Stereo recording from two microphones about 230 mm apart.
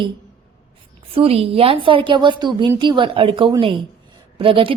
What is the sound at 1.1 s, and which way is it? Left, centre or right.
A woman's voice, right.